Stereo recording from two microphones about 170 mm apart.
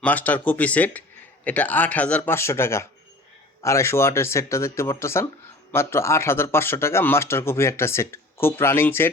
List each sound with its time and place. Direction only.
0.0 s speech: 10° left (ahead or behind)